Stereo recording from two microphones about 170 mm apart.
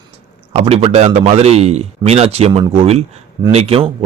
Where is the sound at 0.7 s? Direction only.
35° right (ahead or behind).